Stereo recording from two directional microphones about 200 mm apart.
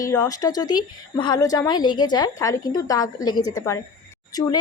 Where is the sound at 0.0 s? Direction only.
15° left (ahead or behind).